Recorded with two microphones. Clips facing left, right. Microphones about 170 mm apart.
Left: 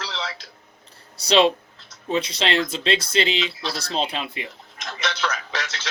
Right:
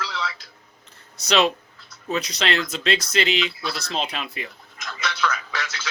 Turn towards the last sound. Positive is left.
turn(degrees=25)  # may be behind; listen again after turning